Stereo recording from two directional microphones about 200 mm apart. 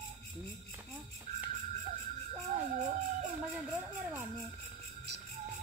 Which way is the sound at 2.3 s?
35° right (ahead or behind).